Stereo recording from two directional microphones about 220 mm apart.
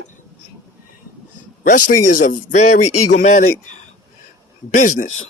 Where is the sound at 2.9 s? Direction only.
90° left.